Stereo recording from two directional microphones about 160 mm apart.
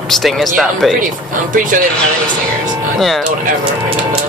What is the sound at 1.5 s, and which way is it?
Speech, 55° right (ahead or behind).